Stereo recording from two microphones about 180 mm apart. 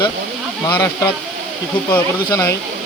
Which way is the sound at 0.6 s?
15° left (ahead or behind).